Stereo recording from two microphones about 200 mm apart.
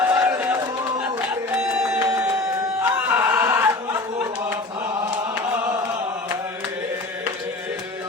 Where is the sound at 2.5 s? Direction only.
15° right (ahead or behind).